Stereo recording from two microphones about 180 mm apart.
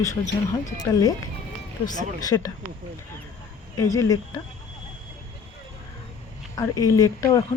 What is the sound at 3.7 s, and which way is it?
Speech, 20° left (ahead or behind).